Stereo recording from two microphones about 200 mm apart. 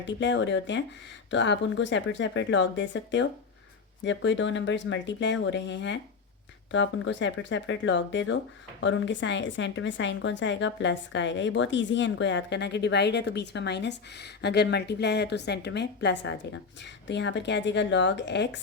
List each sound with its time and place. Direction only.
0.0 s a woman's voice: 65° left (ahead or behind)